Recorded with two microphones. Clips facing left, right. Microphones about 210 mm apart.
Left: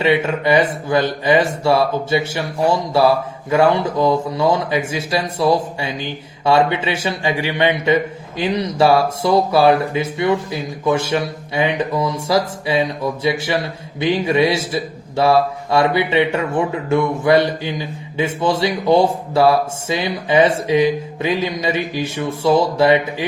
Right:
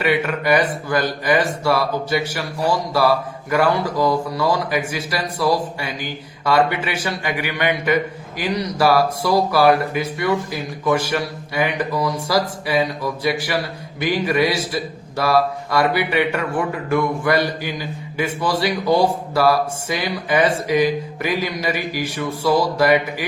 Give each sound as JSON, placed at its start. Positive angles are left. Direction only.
{"t": 0.0, "sound": "speech", "side_deg": 25}